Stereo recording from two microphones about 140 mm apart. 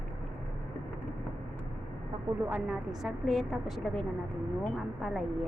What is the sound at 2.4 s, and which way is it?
Speech, 15° right (ahead or behind).